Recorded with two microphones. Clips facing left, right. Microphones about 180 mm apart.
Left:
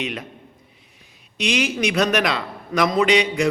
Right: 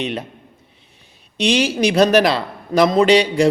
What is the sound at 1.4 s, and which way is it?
A man's voice, 30° right (ahead or behind).